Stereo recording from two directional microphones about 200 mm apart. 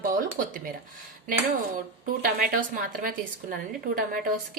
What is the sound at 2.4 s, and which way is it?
Speech, 45° right (ahead or behind).